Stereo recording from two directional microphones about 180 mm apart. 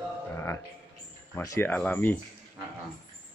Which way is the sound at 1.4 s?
10° left (ahead or behind).